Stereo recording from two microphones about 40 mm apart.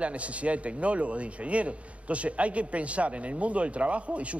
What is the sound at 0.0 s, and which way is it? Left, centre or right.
Speech, right.